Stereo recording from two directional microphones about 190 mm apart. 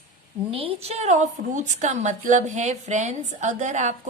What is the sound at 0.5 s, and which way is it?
A woman's voice, 30° right (ahead or behind).